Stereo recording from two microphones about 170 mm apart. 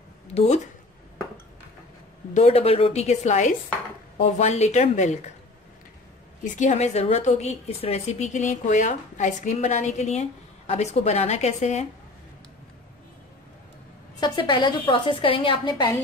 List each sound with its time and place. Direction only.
0.3 s speech: 40° left (ahead or behind)
2.3 s a woman's voice: 35° left (ahead or behind)
6.4 s a woman's voice: 45° left (ahead or behind)
14.2 s a woman's voice: 25° left (ahead or behind)